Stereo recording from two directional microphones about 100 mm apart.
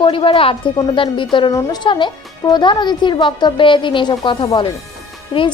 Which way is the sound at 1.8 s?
50° left (ahead or behind).